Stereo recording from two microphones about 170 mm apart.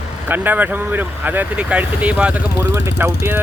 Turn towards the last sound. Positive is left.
turn(degrees=-10)  # may be behind; listen again after turning